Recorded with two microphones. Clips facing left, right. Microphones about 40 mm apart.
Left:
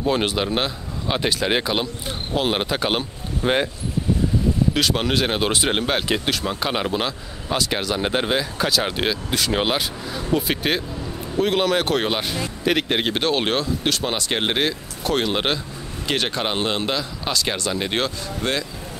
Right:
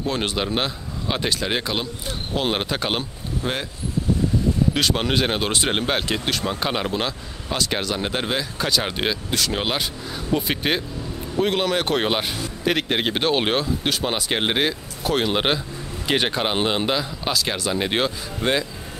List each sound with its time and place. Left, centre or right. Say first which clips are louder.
0.0 s speech: left 3 dB; centre
3.4 s speech: left 6 dB; centre
4.7 s speech: left 1 dB; centre